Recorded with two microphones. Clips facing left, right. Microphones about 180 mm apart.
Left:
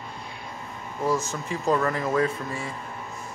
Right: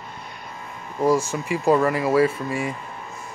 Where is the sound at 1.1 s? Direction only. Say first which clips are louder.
Right 4 dB; 10° right (ahead or behind).